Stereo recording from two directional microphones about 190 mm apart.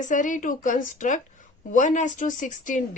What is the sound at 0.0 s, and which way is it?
A woman's voice, 40° left (ahead or behind).